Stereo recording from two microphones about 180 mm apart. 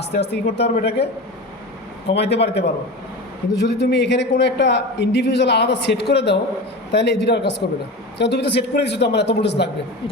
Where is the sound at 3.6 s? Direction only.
70° left (ahead or behind).